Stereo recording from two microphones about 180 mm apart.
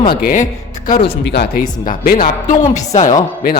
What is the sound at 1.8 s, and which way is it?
Speech, 50° left (ahead or behind).